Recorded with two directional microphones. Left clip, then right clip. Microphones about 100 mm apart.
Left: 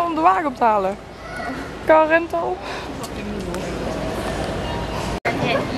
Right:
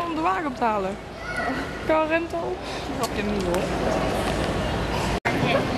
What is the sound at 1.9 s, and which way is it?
Speech, 30° left (ahead or behind).